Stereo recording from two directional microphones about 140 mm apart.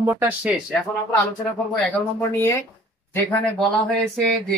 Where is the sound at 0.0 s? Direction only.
15° right (ahead or behind).